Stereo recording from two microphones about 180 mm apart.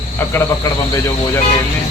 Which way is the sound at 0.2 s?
15° left (ahead or behind).